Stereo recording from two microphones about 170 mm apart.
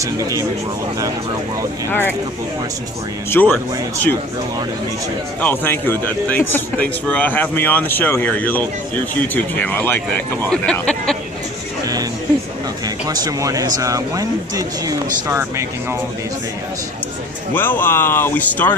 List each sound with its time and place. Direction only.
0.0 s speech: 20° right (ahead or behind)
1.9 s speech: 10° left (ahead or behind)
3.2 s speech: 15° left (ahead or behind)
5.4 s speech: 10° left (ahead or behind)
12.8 s speech: 20° right (ahead or behind)
17.5 s speech: 10° left (ahead or behind)